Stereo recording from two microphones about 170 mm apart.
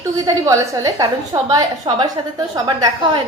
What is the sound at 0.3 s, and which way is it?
A woman's voice, 20° right (ahead or behind).